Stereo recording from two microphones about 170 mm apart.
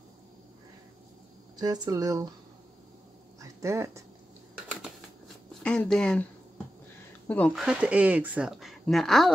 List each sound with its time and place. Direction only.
1.6 s speech: 20° right (ahead or behind)
3.3 s a sound: 15° right (ahead or behind)
5.6 s speech: 5° left (ahead or behind)
7.2 s speech: 10° left (ahead or behind)
7.6 s speech: 5° right (ahead or behind)